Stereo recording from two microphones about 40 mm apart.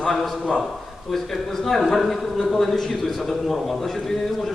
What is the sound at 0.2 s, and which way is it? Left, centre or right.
A man's voice, centre.